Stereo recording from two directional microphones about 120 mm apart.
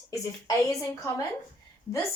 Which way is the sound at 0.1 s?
25° left (ahead or behind).